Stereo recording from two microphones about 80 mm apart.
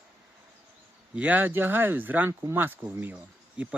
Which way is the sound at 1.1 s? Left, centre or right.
Centre.